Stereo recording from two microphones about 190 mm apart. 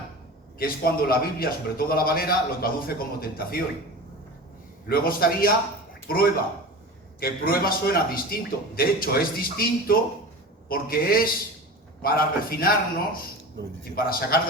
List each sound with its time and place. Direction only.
0.6 s a man's voice: 50° left (ahead or behind)
4.9 s a man's voice: 50° left (ahead or behind)
13.6 s a man's voice: 65° right (ahead or behind)
13.9 s a man's voice: 50° left (ahead or behind)